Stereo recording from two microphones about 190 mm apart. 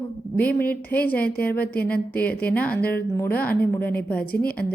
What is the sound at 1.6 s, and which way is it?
Speech, 55° left (ahead or behind).